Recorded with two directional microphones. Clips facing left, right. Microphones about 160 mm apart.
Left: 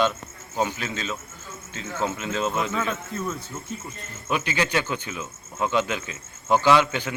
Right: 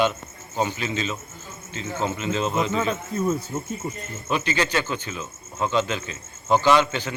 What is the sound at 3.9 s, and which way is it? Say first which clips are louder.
Speech: left 2 dB; 10° left (ahead or behind).